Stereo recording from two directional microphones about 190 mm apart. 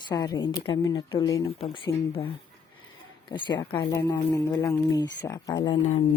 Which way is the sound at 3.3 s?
25° left (ahead or behind).